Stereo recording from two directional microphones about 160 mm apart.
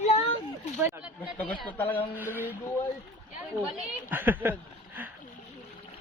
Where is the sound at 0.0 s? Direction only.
40° left (ahead or behind).